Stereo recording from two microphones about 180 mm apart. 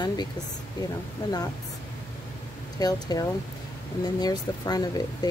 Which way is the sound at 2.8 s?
20° left (ahead or behind).